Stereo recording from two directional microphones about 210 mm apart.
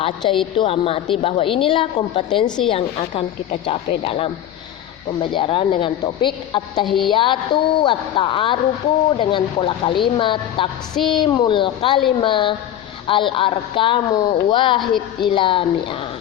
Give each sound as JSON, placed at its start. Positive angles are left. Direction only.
{"t": 0.0, "sound": "speech", "side_deg": 25}
{"t": 6.8, "sound": "a sound", "side_deg": 0}
{"t": 7.1, "sound": "speech", "side_deg": 25}